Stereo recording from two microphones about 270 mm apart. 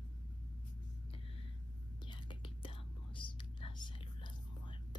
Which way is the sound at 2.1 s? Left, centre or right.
Centre.